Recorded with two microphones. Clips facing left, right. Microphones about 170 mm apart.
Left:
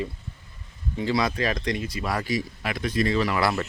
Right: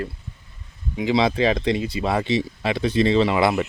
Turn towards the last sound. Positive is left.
turn(degrees=-20)  # may be behind; listen again after turning